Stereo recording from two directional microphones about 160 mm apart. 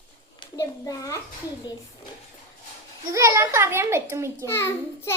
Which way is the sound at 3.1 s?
20° right (ahead or behind).